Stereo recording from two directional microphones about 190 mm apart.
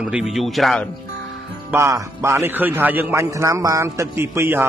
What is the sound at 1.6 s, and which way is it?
A man's voice, 15° right (ahead or behind).